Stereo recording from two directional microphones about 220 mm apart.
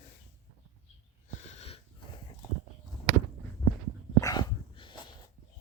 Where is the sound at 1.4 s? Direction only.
30° left (ahead or behind).